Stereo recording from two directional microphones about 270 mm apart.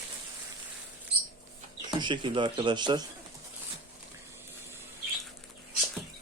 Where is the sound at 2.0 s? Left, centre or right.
Centre.